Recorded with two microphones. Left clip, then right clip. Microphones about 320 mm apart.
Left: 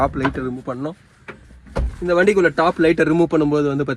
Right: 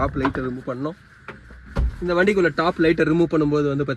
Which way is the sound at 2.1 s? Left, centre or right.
Centre.